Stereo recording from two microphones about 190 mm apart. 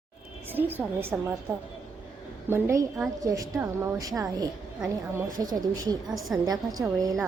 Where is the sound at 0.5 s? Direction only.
10° right (ahead or behind).